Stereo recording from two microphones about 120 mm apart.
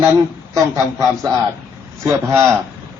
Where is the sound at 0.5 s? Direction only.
25° right (ahead or behind).